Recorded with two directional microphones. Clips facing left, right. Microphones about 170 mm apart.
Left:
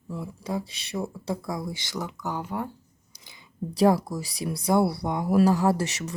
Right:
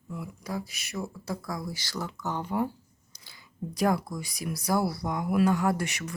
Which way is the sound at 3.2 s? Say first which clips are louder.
Left 3 dB; 20° left (ahead or behind).